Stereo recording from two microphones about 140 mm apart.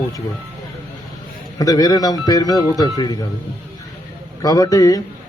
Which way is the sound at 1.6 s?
25° left (ahead or behind).